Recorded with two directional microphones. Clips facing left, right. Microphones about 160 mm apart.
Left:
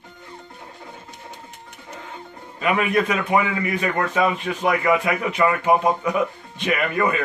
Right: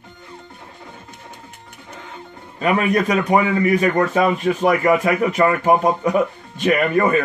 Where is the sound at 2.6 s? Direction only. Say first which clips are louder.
Right 3 dB; 40° right (ahead or behind).